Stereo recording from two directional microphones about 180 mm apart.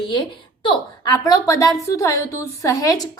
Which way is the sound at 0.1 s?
25° left (ahead or behind).